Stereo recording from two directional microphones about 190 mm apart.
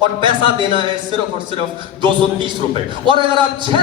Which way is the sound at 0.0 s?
25° right (ahead or behind).